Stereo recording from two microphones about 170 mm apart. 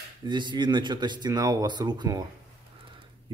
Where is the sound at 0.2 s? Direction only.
25° right (ahead or behind).